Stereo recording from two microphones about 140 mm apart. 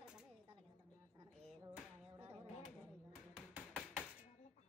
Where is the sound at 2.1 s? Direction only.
10° right (ahead or behind).